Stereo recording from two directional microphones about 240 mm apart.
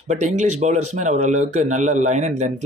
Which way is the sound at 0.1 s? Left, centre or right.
Right.